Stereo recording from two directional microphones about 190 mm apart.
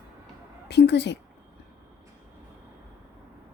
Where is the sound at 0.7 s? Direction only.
65° left (ahead or behind).